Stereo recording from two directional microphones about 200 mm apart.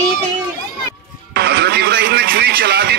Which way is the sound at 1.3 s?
55° right (ahead or behind).